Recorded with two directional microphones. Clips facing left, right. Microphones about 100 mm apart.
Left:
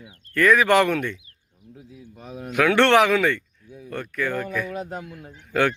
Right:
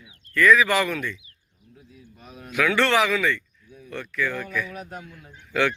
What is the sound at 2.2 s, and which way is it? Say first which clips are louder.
Speech: left 8 dB; 25° left (ahead or behind).